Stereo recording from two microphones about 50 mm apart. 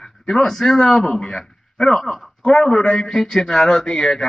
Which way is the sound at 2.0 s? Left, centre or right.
Centre.